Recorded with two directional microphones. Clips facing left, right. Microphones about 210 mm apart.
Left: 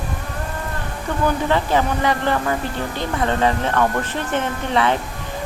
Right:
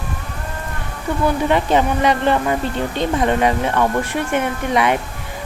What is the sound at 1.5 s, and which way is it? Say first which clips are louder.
Speech: right 3 dB; 20° right (ahead or behind).